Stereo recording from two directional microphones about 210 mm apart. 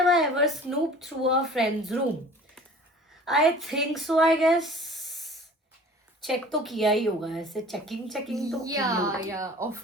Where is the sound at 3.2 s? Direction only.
Centre (ahead or behind).